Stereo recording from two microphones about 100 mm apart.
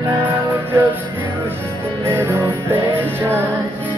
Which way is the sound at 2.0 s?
25° right (ahead or behind).